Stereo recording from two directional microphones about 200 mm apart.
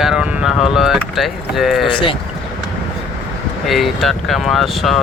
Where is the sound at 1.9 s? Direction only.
25° left (ahead or behind).